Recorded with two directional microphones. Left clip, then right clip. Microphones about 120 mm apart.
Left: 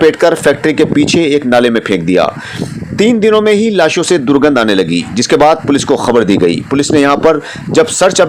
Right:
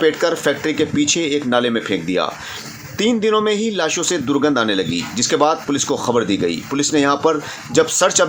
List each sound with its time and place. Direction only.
0.0 s a man's voice: 55° left (ahead or behind)